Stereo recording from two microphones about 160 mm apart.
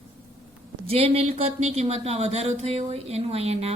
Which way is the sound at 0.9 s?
40° right (ahead or behind).